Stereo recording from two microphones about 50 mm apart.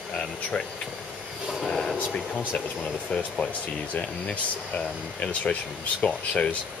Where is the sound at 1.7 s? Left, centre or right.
Centre.